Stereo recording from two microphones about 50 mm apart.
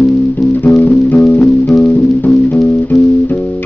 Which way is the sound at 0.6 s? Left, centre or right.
Left.